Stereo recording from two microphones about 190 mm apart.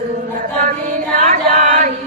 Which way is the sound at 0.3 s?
45° right (ahead or behind).